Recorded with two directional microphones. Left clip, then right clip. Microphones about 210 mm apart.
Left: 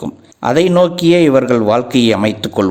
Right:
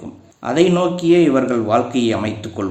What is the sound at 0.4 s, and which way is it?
A man's voice, 40° left (ahead or behind).